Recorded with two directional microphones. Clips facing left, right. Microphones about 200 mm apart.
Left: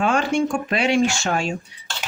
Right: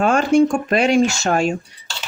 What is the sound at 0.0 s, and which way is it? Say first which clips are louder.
Speech: right 6 dB; 45° right (ahead or behind).